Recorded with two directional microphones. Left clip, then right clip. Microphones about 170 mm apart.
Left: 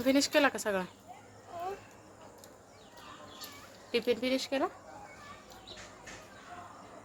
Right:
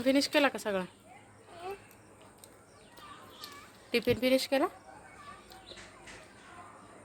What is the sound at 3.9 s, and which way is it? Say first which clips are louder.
Speech: right 3 dB; 35° right (ahead or behind).